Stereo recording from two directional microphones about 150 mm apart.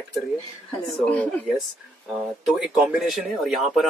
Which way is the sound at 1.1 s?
10° left (ahead or behind).